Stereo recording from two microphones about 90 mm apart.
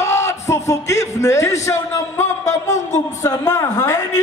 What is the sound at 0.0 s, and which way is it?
A man's voice, 30° left (ahead or behind).